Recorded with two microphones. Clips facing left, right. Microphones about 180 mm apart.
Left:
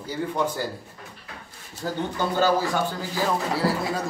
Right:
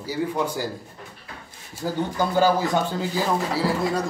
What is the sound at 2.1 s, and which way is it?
Speech, 15° right (ahead or behind).